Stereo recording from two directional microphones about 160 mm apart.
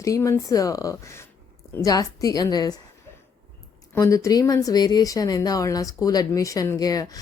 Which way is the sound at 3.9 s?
20° left (ahead or behind).